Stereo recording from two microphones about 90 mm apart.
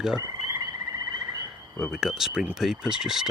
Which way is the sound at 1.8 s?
5° right (ahead or behind).